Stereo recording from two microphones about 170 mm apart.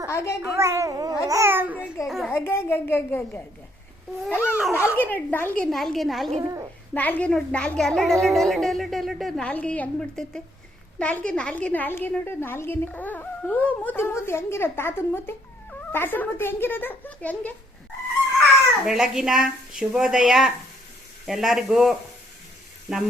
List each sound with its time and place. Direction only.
0.1 s a sound: 15° left (ahead or behind)
0.5 s a child's voice: 15° right (ahead or behind)
2.3 s a woman's voice: 15° left (ahead or behind)
4.5 s speech: 10° right (ahead or behind)
4.8 s a woman's voice: 15° left (ahead or behind)
6.4 s a child's voice: 20° right (ahead or behind)
6.9 s a woman's voice: 10° left (ahead or behind)
18.9 s a woman's voice: 5° right (ahead or behind)